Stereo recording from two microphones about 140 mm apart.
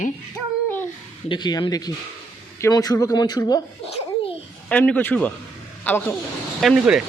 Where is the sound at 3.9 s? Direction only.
50° left (ahead or behind).